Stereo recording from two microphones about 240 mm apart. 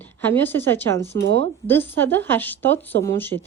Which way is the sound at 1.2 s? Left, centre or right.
Right.